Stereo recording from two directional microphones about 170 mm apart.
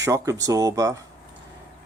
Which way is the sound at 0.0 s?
20° right (ahead or behind).